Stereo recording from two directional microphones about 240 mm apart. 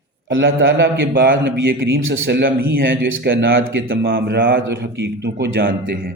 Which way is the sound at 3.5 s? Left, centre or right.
Right.